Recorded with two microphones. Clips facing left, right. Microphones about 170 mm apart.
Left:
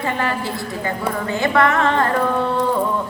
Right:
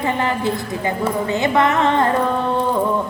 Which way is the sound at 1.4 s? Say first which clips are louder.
Even; 20° right (ahead or behind).